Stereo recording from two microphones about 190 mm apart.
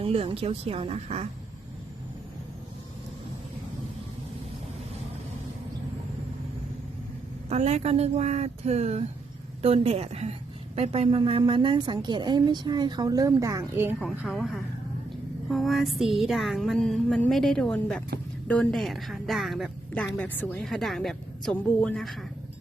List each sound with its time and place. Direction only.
0.0 s speech: 30° right (ahead or behind)
7.5 s a woman's voice: 35° right (ahead or behind); by 13.9 s 15° right (ahead or behind)
14.0 s a woman's voice: centre (ahead or behind)